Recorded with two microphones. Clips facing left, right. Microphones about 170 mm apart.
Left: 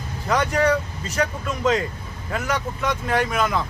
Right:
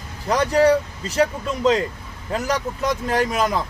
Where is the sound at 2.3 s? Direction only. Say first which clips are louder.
Right 2 dB; 35° right (ahead or behind).